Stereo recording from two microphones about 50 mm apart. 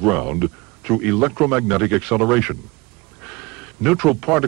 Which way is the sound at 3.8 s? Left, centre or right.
Centre.